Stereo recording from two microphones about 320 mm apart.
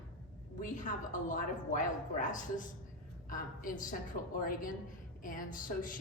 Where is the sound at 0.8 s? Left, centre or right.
Left.